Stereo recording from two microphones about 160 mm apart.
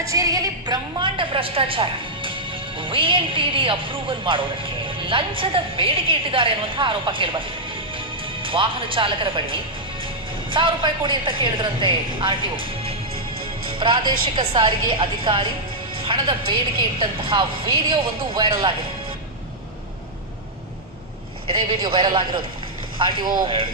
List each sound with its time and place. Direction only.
0.0 s a woman's voice: 20° right (ahead or behind)
21.4 s a woman's voice: 30° right (ahead or behind)